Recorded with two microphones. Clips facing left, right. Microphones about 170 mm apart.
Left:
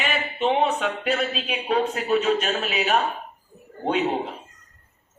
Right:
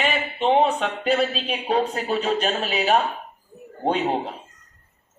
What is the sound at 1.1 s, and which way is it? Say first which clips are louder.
Speech: right 6 dB; 35° right (ahead or behind).